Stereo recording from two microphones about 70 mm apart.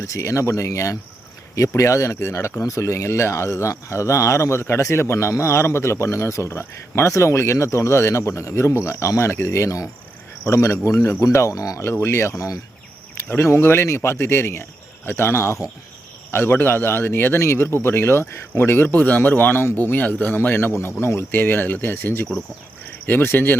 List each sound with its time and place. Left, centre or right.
0.0 s speech: left
2.6 s a man's voice: left
11.9 s a man's voice: left
13.4 s a man's voice: left